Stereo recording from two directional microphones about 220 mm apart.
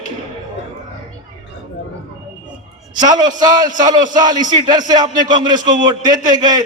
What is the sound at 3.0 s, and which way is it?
Speech, 20° right (ahead or behind).